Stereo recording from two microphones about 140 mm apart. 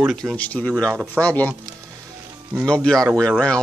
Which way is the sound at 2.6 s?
5° left (ahead or behind).